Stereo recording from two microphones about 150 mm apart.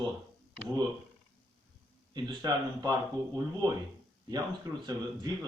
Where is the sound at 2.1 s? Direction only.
25° right (ahead or behind).